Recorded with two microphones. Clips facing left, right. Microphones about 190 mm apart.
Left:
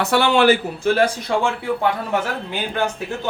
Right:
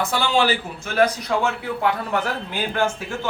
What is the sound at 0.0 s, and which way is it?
Speech, 65° left (ahead or behind).